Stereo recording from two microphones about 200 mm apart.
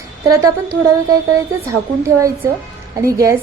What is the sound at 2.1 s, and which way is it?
A woman's voice, 15° right (ahead or behind).